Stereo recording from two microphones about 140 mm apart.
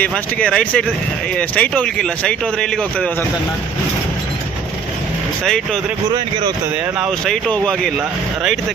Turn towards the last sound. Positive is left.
turn(degrees=5)  # may be behind; listen again after turning